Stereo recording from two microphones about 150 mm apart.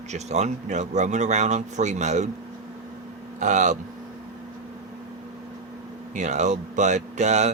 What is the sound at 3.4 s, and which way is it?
Speech, 55° right (ahead or behind).